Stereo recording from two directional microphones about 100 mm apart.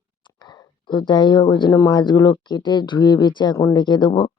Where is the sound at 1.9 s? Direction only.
45° left (ahead or behind).